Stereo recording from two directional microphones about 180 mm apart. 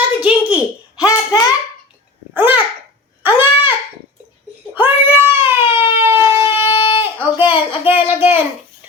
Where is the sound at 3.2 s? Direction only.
10° right (ahead or behind).